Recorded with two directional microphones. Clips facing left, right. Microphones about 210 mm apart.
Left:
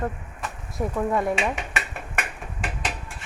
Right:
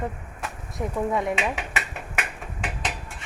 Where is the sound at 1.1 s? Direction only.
Centre (ahead or behind).